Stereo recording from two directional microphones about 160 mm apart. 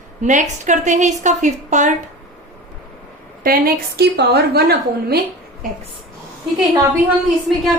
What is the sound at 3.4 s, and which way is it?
A woman's voice, 65° right (ahead or behind).